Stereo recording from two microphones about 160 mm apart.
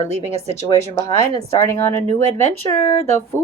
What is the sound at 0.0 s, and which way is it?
Speech, 45° left (ahead or behind).